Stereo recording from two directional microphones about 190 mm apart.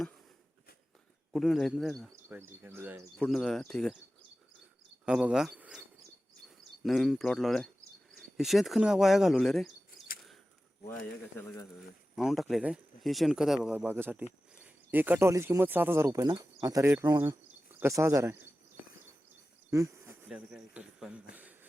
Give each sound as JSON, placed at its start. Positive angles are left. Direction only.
{"t": 1.3, "sound": "speech", "side_deg": 0}
{"t": 3.2, "sound": "speech", "side_deg": 0}
{"t": 5.0, "sound": "speech", "side_deg": -5}
{"t": 6.8, "sound": "speech", "side_deg": 0}
{"t": 11.3, "sound": "speech", "side_deg": 15}
{"t": 12.1, "sound": "speech", "side_deg": 0}
{"t": 19.7, "sound": "speech", "side_deg": -15}
{"t": 20.2, "sound": "speech", "side_deg": -5}